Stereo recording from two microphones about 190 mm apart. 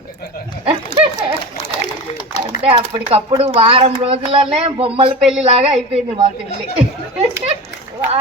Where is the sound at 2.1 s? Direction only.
30° left (ahead or behind).